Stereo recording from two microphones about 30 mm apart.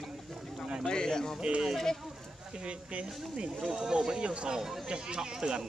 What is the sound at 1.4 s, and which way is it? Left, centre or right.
Speech, right.